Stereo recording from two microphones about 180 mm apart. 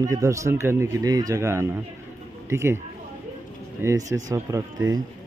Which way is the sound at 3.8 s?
15° right (ahead or behind).